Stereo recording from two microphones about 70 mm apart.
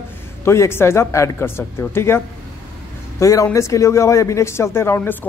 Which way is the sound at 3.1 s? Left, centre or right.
Left.